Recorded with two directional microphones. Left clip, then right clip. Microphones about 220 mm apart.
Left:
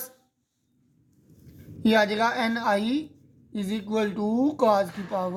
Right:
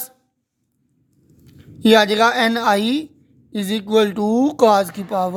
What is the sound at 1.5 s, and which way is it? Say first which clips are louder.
A woman's voice: right 11 dB; 40° right (ahead or behind).